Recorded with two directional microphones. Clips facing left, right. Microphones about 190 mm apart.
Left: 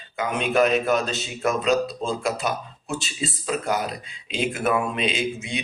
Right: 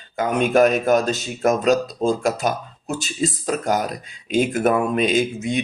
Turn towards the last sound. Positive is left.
turn(degrees=-45)  # may be behind; listen again after turning